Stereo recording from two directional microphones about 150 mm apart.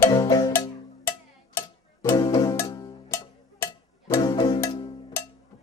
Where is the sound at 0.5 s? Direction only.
15° left (ahead or behind).